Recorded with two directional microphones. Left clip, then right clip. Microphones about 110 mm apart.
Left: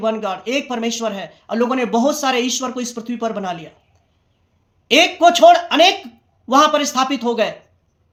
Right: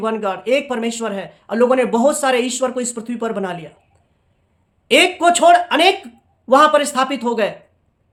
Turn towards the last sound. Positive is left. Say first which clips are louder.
# even
turn(degrees=-35)  # may be behind; listen again after turning